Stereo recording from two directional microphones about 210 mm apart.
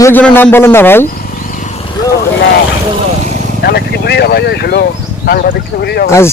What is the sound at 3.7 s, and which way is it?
Speech, 50° left (ahead or behind).